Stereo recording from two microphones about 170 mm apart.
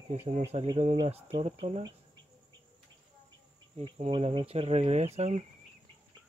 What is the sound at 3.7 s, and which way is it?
Speech, 35° right (ahead or behind).